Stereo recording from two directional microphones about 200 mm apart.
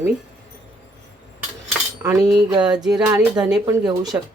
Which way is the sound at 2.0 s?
15° right (ahead or behind).